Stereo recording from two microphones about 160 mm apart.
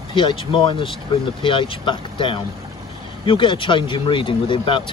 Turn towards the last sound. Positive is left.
turn(degrees=30)  # may be behind; listen again after turning